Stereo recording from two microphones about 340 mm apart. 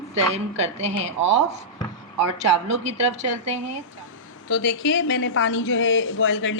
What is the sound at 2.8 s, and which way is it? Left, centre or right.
Speech, centre.